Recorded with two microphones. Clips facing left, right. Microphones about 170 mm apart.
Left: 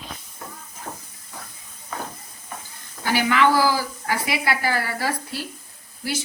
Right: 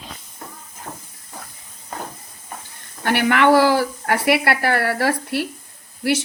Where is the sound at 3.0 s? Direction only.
60° right (ahead or behind).